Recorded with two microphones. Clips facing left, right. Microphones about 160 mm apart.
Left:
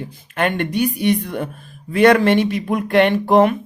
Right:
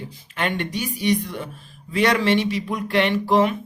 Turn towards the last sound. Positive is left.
turn(degrees=55)  # may be behind; listen again after turning